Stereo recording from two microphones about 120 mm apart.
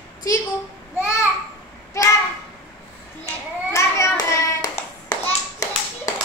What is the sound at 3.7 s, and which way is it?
Hands, 25° left (ahead or behind).